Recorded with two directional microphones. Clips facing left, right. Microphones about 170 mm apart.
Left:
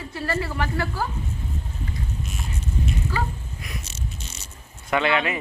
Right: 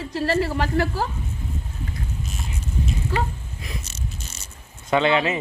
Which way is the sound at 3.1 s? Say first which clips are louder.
Right 4 dB; 25° right (ahead or behind).